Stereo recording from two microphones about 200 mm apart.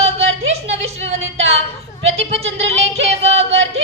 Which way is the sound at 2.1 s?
30° right (ahead or behind).